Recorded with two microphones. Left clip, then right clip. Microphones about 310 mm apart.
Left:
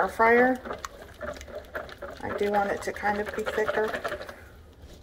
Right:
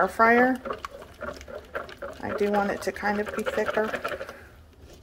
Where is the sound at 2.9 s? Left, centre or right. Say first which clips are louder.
Right 2 dB; right.